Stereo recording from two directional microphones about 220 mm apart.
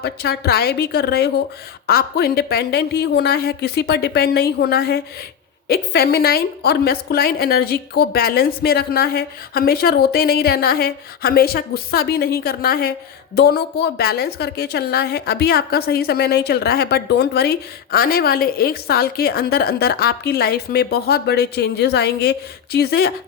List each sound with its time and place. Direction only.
0.0 s a woman's voice: 45° left (ahead or behind)